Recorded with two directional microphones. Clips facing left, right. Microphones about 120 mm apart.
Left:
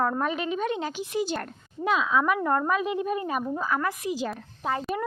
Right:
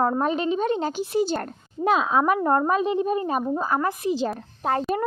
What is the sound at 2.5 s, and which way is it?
A child's voice, 35° right (ahead or behind).